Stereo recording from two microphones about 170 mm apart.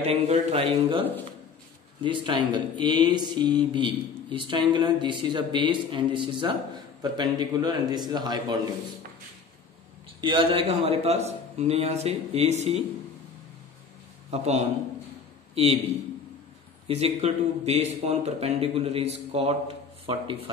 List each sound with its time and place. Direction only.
0.0 s speech: 40° right (ahead or behind)
2.0 s a man's voice: 30° right (ahead or behind)
10.2 s speech: 30° right (ahead or behind)
14.3 s a man's voice: 40° right (ahead or behind)
16.8 s speech: 40° right (ahead or behind)